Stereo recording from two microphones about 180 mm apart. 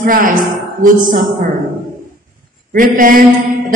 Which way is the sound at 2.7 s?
50° right (ahead or behind).